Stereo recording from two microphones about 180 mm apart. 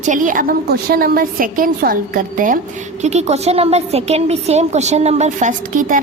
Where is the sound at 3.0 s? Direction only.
35° right (ahead or behind).